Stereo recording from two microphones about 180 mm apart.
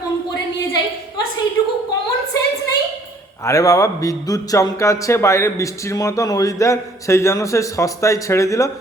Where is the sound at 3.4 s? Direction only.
15° left (ahead or behind).